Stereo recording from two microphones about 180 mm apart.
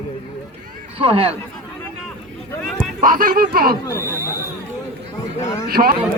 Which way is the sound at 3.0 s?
50° right (ahead or behind).